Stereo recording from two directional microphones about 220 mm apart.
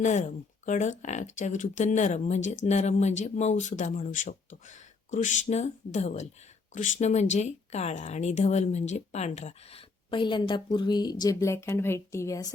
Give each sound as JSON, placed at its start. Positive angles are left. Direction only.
{"t": 0.0, "sound": "speech", "side_deg": 35}